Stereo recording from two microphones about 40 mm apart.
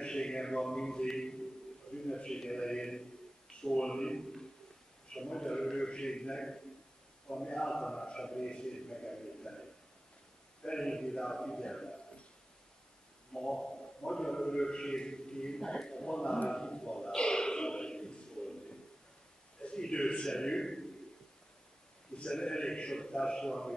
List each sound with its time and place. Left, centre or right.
0.0 s a man's voice: centre
13.3 s a man's voice: centre
16.4 s a sound: centre
19.8 s a man's voice: centre
22.1 s a man's voice: left